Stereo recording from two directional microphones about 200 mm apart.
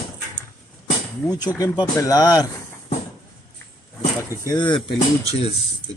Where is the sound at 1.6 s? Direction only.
15° left (ahead or behind).